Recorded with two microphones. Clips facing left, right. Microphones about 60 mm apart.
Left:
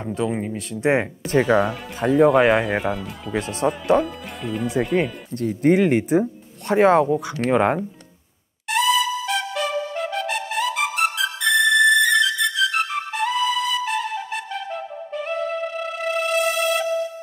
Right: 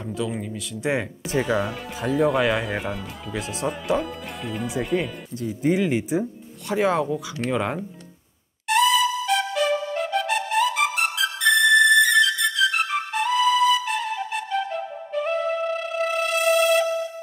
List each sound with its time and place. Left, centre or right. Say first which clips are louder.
0.2 s speech: left 4 dB; left
0.6 s speech: left 5 dB; left
1.2 s speech: left 5 dB; centre
5.3 s speech: left 5 dB; left
8.6 s music: right 1 dB; centre